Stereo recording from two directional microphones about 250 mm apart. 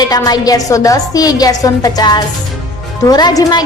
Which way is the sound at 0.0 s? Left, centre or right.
Centre.